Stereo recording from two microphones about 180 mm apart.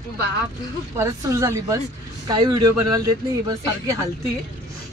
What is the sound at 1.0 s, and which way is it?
A woman's voice, 20° right (ahead or behind).